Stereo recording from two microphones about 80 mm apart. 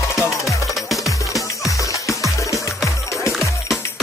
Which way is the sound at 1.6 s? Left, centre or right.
Left.